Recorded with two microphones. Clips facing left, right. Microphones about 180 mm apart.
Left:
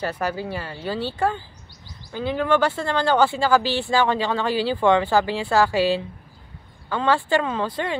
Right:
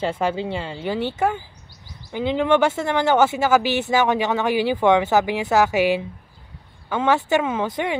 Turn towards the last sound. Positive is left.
turn(degrees=-15)  # may be behind; listen again after turning